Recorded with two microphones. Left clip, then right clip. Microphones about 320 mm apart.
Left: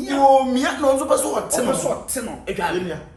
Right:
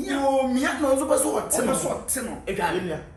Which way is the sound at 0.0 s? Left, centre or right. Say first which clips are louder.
Left 8 dB; centre.